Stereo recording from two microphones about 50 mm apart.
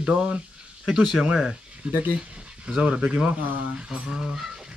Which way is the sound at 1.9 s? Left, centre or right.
Right.